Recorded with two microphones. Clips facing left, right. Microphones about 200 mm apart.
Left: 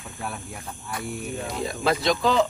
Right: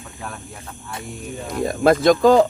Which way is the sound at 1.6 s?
50° right (ahead or behind).